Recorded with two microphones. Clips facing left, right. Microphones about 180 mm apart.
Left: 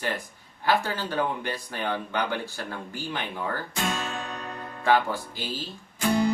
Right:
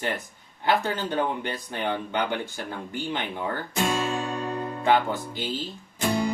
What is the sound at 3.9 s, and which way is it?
Music, 30° right (ahead or behind).